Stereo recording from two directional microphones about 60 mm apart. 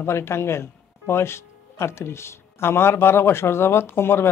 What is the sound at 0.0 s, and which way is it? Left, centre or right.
Speech, left.